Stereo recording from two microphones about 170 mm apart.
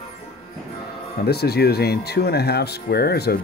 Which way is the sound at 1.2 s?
70° left (ahead or behind).